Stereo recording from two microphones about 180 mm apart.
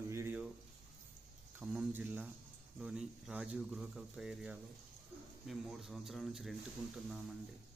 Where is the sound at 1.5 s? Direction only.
5° right (ahead or behind).